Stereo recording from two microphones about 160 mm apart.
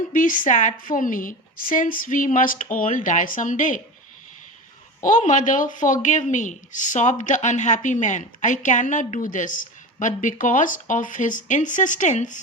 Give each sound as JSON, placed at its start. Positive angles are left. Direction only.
{"t": 0.1, "sound": "a woman's voice", "side_deg": 55}
{"t": 5.0, "sound": "speech", "side_deg": 55}